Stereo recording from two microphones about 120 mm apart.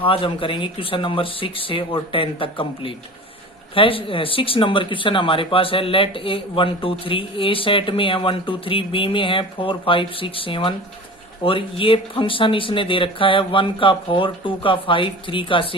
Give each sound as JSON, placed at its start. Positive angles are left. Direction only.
{"t": 0.0, "sound": "speech", "side_deg": 50}